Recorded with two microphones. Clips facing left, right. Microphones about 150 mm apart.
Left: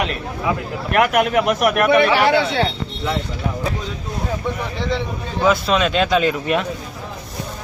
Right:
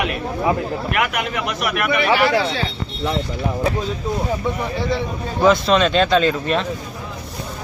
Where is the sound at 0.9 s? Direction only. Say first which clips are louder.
Left 9 dB; 45° left (ahead or behind).